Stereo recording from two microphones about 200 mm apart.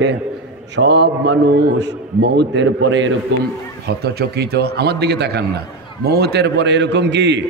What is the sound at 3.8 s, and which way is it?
A man's voice, 55° right (ahead or behind).